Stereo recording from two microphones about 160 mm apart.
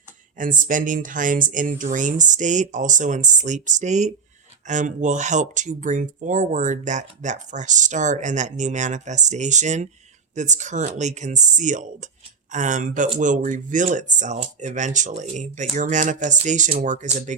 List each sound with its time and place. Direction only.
0.3 s speech: 55° right (ahead or behind)